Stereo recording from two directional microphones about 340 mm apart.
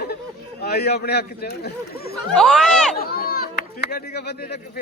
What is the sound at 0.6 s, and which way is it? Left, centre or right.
Speech, left.